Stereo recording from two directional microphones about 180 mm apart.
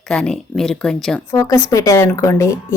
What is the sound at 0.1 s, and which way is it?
Speech, 5° left (ahead or behind).